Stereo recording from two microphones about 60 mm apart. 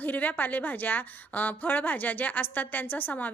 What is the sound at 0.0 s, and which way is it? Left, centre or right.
A woman's voice, left.